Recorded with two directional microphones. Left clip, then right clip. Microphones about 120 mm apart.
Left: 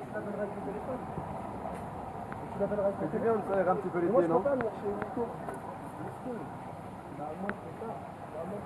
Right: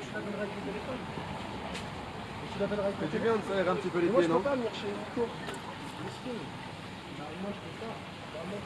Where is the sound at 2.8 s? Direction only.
25° right (ahead or behind).